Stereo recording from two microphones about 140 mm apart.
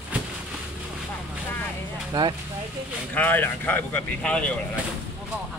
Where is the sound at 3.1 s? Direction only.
10° left (ahead or behind).